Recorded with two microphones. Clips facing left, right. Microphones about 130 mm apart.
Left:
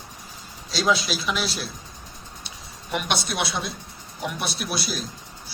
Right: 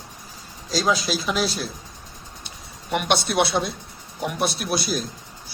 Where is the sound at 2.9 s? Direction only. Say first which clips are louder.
Right 5 dB; 60° right (ahead or behind).